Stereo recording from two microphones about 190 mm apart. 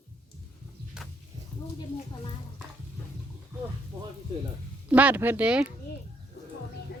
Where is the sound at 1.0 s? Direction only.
5° right (ahead or behind).